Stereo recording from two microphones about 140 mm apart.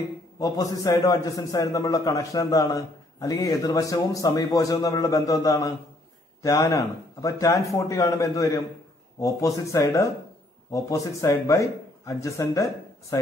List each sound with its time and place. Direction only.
0.4 s a man's voice: 25° left (ahead or behind)